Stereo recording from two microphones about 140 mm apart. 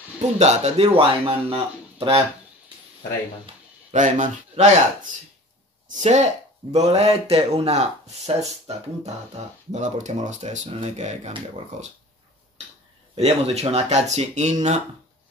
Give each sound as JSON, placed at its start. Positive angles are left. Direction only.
{"t": 0.4, "sound": "speech", "side_deg": -50}
{"t": 3.9, "sound": "speech", "side_deg": -60}
{"t": 5.9, "sound": "speech", "side_deg": -55}
{"t": 13.1, "sound": "speech", "side_deg": -50}